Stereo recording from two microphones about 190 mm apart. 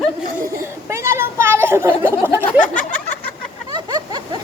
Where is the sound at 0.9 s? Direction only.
15° right (ahead or behind).